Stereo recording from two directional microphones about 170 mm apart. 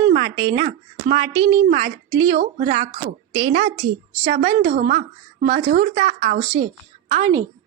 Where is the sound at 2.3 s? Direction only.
50° right (ahead or behind).